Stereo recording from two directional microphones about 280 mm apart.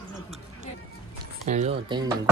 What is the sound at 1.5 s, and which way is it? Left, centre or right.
Speech, right.